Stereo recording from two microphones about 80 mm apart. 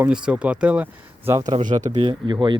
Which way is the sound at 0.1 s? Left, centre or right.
Centre.